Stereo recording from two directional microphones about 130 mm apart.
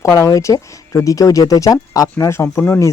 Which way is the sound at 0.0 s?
25° left (ahead or behind).